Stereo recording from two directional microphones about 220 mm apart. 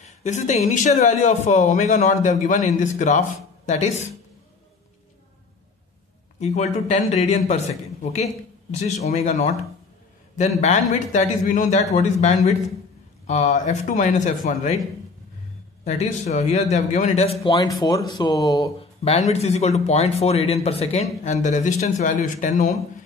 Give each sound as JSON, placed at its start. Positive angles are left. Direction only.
{"t": 0.0, "sound": "speech", "side_deg": 30}
{"t": 6.4, "sound": "speech", "side_deg": 30}
{"t": 10.6, "sound": "speech", "side_deg": 35}
{"t": 15.8, "sound": "speech", "side_deg": 30}
{"t": 19.0, "sound": "speech", "side_deg": 30}